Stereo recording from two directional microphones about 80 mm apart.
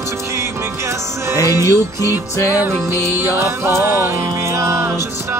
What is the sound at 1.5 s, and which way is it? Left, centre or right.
Music, right.